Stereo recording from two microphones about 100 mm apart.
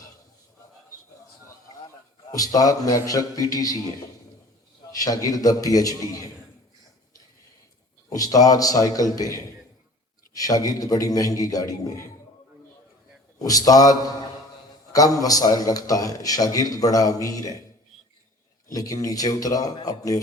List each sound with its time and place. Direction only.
2.3 s a man's voice: 35° left (ahead or behind)
4.9 s a man's voice: 35° left (ahead or behind)
8.1 s a man's voice: 40° left (ahead or behind)
13.4 s a man's voice: 35° left (ahead or behind)
14.9 s a man's voice: 35° left (ahead or behind)
18.7 s a man's voice: 35° left (ahead or behind)